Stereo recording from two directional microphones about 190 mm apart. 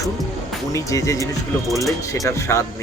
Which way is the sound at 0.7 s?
15° left (ahead or behind).